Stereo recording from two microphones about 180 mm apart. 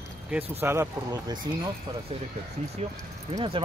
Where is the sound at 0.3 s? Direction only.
10° right (ahead or behind).